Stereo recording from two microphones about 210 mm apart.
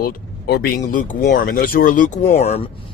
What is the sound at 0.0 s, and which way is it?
Speech, 50° left (ahead or behind).